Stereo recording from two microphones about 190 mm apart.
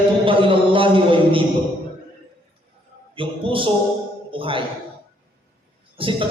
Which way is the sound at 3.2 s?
25° right (ahead or behind).